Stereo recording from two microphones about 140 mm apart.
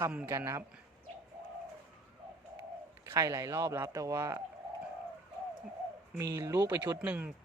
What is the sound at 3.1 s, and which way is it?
Speech, 25° right (ahead or behind).